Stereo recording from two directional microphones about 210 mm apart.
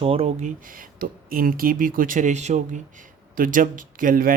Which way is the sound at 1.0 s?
45° right (ahead or behind).